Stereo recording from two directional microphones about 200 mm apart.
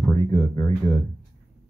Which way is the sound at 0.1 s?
20° left (ahead or behind).